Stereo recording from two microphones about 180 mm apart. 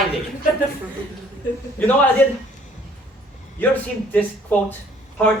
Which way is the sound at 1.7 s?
10° left (ahead or behind).